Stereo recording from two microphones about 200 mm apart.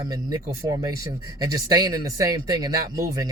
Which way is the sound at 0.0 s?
20° right (ahead or behind).